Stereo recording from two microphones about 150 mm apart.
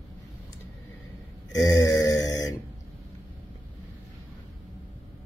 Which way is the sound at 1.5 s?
25° left (ahead or behind).